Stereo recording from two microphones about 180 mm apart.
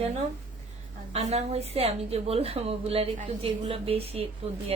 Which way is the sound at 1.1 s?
35° right (ahead or behind).